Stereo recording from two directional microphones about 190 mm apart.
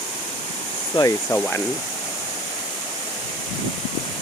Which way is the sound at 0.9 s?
15° left (ahead or behind).